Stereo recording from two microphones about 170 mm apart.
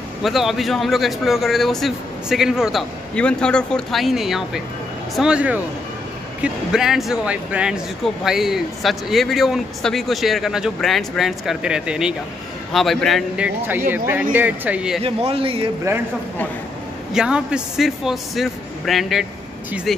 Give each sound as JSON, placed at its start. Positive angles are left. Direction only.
{"t": 0.2, "sound": "speech", "side_deg": 0}
{"t": 13.7, "sound": "speech", "side_deg": -10}
{"t": 15.0, "sound": "speech", "side_deg": -35}
{"t": 17.1, "sound": "speech", "side_deg": -5}